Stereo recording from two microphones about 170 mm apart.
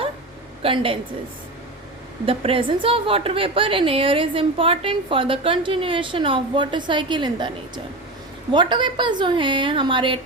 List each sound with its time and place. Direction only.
0.6 s a woman's voice: 30° right (ahead or behind)
2.2 s a woman's voice: 35° right (ahead or behind)
8.5 s a woman's voice: 25° right (ahead or behind)